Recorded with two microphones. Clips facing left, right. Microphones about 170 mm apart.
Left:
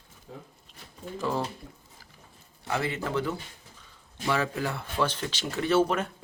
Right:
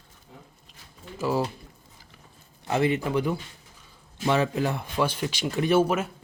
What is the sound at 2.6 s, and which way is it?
Speech, 20° right (ahead or behind).